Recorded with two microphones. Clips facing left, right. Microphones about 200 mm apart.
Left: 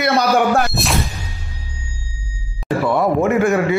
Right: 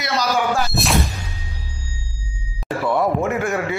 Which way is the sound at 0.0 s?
60° left (ahead or behind).